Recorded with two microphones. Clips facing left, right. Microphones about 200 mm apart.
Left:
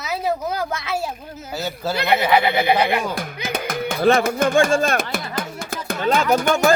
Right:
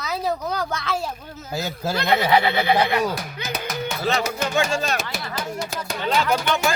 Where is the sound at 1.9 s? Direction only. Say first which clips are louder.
Left 1 dB; 10° left (ahead or behind).